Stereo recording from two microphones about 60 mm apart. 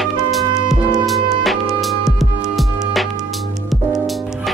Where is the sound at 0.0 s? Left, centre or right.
Centre.